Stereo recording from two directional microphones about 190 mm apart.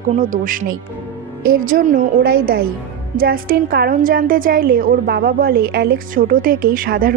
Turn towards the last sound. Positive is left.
turn(degrees=-50)  # may be behind; listen again after turning